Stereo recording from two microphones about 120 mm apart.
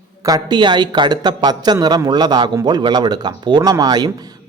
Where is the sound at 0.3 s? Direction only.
35° right (ahead or behind).